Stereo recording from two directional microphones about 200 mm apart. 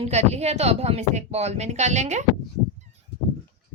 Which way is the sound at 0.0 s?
35° right (ahead or behind).